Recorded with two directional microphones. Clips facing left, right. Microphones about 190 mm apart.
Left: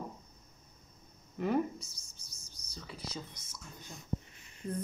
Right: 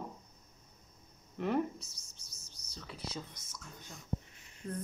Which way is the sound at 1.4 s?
Centre (ahead or behind).